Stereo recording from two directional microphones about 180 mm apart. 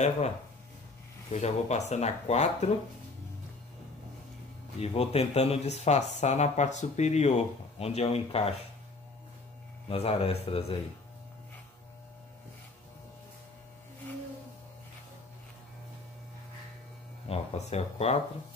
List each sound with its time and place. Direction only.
1.3 s speech: 40° left (ahead or behind)
4.7 s speech: 35° left (ahead or behind)
9.8 s speech: 35° left (ahead or behind)
17.3 s speech: 35° left (ahead or behind)